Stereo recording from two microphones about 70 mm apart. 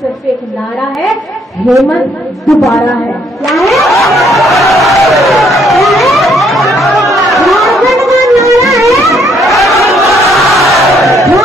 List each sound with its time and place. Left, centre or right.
2.4 s a woman's voice: centre
3.4 s vehicle: centre
4.1 s a sound: centre
5.3 s chatter: centre
8.2 s music: right
8.5 s music: centre
10.2 s battle cry: centre